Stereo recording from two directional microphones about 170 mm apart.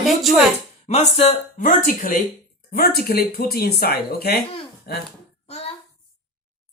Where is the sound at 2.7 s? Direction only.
65° left (ahead or behind).